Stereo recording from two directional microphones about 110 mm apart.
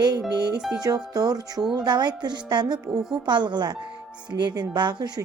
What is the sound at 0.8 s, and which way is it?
Speech, 35° right (ahead or behind).